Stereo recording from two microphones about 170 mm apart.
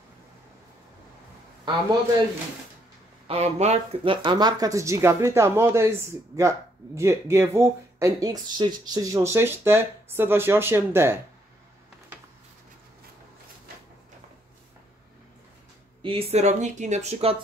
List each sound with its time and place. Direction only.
3.3 s speech: 40° right (ahead or behind); by 11.1 s 15° right (ahead or behind)
16.0 s speech: 30° right (ahead or behind)